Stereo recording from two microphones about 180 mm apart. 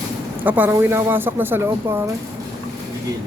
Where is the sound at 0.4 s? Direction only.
10° right (ahead or behind).